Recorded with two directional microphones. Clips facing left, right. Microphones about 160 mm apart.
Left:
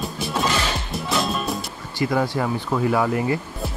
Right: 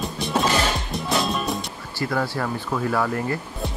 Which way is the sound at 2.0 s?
15° left (ahead or behind).